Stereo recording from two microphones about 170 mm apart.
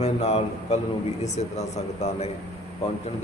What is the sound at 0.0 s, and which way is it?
A man's voice, 40° left (ahead or behind).